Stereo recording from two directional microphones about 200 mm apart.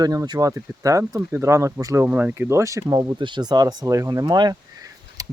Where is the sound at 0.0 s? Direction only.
20° right (ahead or behind).